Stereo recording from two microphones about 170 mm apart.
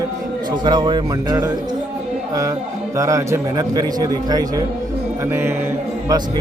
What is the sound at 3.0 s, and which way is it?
A man's voice, 20° right (ahead or behind).